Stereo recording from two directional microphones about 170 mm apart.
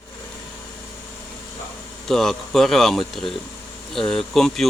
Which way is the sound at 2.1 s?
Centre (ahead or behind).